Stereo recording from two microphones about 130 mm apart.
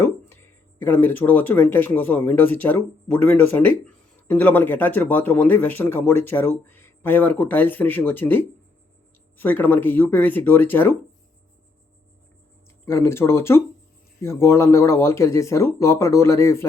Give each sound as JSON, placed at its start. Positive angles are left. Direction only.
{"t": 0.0, "sound": "speech", "side_deg": 20}
{"t": 12.8, "sound": "speech", "side_deg": 20}